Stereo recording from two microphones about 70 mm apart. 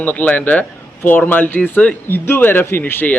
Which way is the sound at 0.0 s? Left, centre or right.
Left.